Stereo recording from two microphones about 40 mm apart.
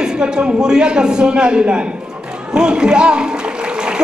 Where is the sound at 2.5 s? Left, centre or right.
Right.